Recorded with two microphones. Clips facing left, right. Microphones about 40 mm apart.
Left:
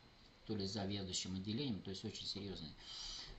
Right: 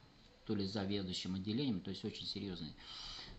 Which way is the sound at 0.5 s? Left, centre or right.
Right.